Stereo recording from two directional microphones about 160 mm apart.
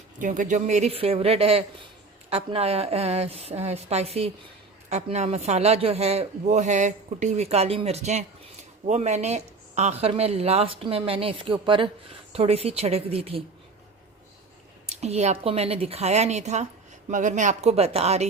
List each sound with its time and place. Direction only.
0.2 s speech: 55° right (ahead or behind); by 13.4 s 35° right (ahead or behind)
14.8 s speech: 45° right (ahead or behind)